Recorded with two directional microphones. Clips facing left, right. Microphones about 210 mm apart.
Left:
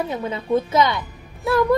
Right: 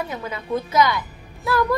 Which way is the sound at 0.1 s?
25° left (ahead or behind).